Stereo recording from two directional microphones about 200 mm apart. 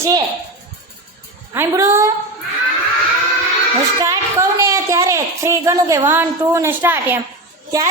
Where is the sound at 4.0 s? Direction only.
15° right (ahead or behind).